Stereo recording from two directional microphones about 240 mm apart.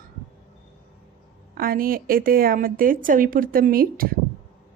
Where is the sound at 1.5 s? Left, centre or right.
Right.